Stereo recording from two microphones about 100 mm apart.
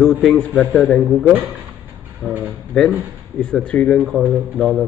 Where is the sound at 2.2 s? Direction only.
10° left (ahead or behind).